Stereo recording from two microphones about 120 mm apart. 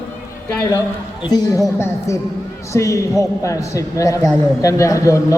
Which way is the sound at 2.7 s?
25° left (ahead or behind).